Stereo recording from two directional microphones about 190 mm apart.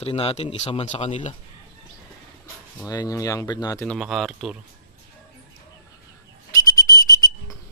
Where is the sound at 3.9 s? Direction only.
Centre (ahead or behind).